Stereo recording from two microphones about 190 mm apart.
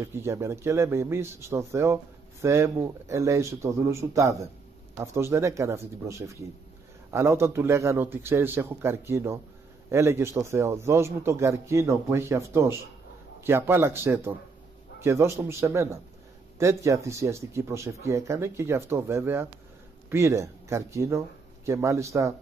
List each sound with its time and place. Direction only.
0.0 s a man's voice: 15° right (ahead or behind)